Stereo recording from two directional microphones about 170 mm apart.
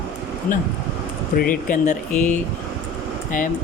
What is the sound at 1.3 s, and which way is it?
Speech, 55° left (ahead or behind).